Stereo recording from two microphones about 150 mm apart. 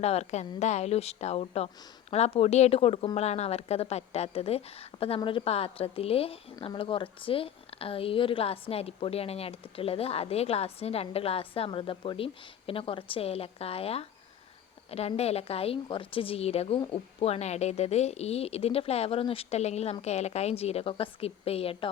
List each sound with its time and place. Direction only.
0.0 s a woman's voice: 45° left (ahead or behind)